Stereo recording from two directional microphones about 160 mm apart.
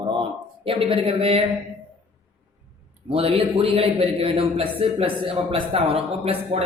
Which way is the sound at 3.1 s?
40° right (ahead or behind).